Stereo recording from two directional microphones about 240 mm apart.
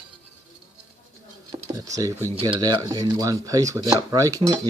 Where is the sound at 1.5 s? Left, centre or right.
Centre.